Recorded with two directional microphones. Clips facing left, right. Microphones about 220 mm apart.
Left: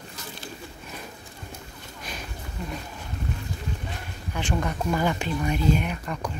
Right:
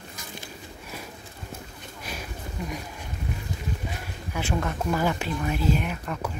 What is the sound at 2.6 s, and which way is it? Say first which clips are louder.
Speech: right 1 dB; 10° right (ahead or behind).